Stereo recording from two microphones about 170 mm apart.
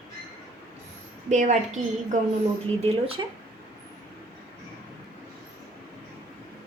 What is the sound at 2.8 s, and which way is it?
Speech, 35° right (ahead or behind).